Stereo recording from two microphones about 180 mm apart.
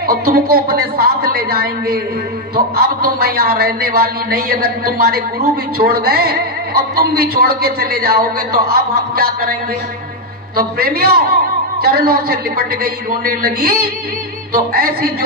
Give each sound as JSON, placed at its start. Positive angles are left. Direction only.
{"t": 0.0, "sound": "a woman's voice", "side_deg": -55}